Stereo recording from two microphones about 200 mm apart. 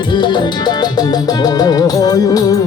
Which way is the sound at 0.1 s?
20° left (ahead or behind).